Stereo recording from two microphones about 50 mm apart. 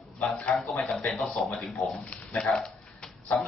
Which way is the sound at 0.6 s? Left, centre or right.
Centre.